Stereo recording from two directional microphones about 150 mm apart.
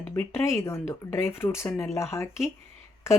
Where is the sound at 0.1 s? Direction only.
15° left (ahead or behind).